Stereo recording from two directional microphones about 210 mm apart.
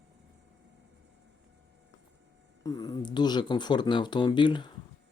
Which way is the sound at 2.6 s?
15° left (ahead or behind).